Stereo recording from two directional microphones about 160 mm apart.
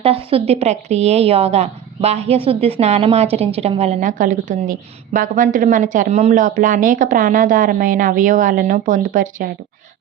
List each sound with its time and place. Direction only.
0.0 s a woman's voice: 35° right (ahead or behind); by 9.5 s 55° right (ahead or behind)